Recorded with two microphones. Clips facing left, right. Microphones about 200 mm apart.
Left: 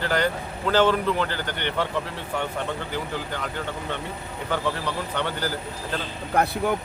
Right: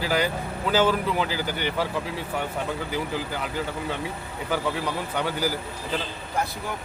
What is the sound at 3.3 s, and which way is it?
Speech, 10° right (ahead or behind).